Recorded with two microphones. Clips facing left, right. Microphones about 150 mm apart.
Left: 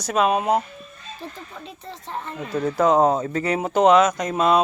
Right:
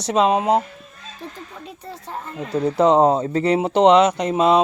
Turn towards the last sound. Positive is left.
turn(degrees=-25)  # may be behind; listen again after turning